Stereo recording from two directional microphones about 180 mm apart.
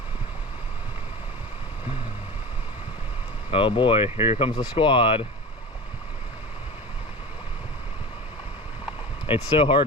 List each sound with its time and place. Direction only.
3.5 s speech: 30° left (ahead or behind)
9.2 s speech: 30° left (ahead or behind)